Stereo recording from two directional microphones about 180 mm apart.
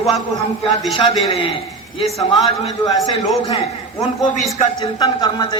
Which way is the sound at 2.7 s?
20° left (ahead or behind).